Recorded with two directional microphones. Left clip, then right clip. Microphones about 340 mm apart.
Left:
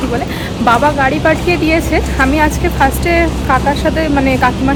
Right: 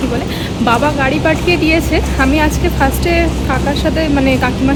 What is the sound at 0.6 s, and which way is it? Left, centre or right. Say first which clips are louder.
Speech: left 3 dB; centre.